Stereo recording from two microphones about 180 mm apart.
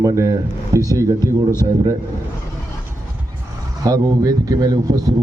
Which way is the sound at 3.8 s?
20° right (ahead or behind).